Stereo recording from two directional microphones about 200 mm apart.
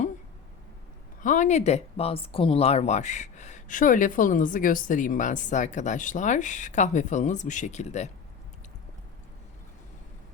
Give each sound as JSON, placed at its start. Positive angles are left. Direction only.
{"t": 1.2, "sound": "speech", "side_deg": 40}